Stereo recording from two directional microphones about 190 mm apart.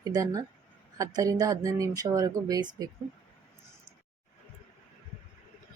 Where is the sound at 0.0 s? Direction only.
20° right (ahead or behind).